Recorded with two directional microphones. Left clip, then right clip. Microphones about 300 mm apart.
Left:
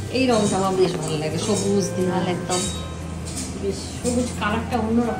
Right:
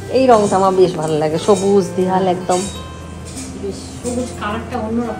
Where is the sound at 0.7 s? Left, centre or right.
Centre.